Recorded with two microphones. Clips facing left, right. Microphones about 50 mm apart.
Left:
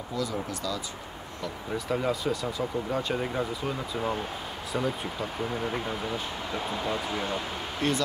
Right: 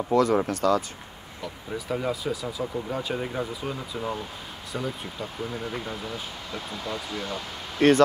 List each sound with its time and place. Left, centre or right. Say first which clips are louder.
0.1 s speech: right 10 dB; right
1.7 s speech: even; centre; by 7.4 s left
7.8 s speech: right 10 dB; right